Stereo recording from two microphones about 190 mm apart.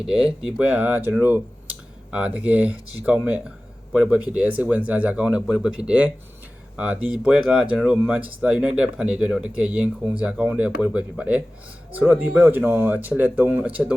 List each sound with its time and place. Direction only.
0.0 s speech: 5° right (ahead or behind)